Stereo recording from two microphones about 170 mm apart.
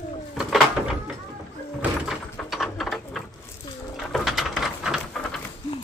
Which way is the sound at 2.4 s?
5° left (ahead or behind).